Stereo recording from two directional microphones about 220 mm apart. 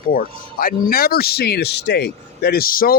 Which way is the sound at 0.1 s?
40° left (ahead or behind).